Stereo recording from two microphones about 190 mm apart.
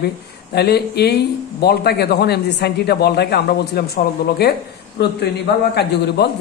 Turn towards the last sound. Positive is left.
turn(degrees=60)  # may be behind; listen again after turning